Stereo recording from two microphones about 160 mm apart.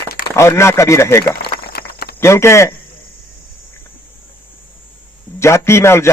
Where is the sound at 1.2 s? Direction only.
75° left (ahead or behind).